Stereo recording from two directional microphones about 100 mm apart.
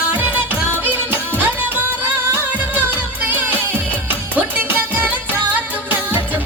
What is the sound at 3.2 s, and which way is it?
Music, 20° right (ahead or behind).